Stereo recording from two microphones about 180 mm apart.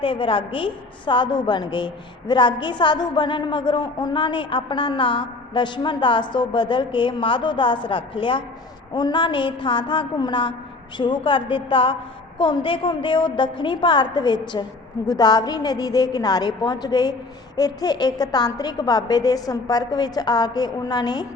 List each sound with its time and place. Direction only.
0.0 s a woman's voice: 30° left (ahead or behind)